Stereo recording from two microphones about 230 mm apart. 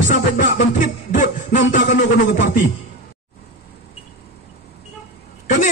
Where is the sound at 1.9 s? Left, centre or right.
Left.